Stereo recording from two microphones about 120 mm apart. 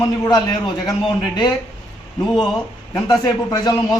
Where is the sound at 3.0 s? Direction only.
35° left (ahead or behind).